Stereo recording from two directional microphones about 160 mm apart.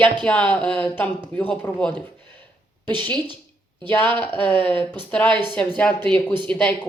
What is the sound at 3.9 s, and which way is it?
A woman's voice, 10° left (ahead or behind).